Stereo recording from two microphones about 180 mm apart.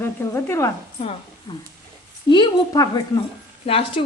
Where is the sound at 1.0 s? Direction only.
35° left (ahead or behind).